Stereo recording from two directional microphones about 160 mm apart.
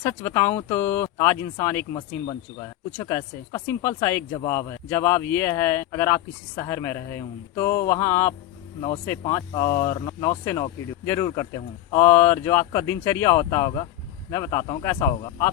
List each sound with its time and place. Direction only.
0.0 s speech: 15° left (ahead or behind)
1.9 s speech: 30° left (ahead or behind)
4.3 s speech: 25° left (ahead or behind)